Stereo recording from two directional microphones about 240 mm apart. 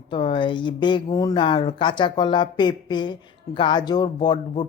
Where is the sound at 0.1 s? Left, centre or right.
Left.